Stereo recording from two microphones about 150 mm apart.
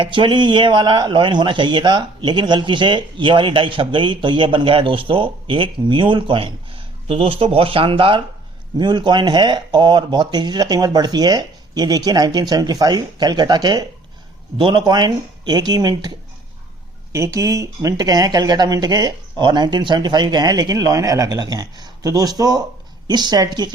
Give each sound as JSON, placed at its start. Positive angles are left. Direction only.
{"t": 0.0, "sound": "a man's voice", "side_deg": -35}